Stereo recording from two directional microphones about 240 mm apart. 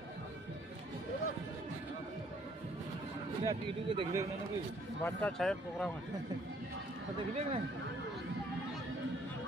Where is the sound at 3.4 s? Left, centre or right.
Centre.